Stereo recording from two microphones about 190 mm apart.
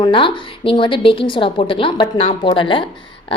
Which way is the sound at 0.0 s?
25° left (ahead or behind).